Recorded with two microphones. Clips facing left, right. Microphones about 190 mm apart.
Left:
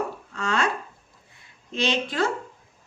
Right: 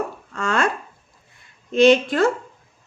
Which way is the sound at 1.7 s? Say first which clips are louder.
Right 12 dB; 50° right (ahead or behind).